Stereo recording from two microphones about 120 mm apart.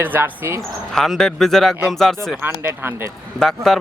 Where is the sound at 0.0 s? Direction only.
15° right (ahead or behind).